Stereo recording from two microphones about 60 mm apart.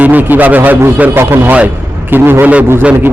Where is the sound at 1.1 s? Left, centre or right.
Right.